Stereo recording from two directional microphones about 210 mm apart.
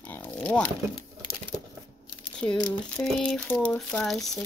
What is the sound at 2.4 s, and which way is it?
Speech, 5° left (ahead or behind).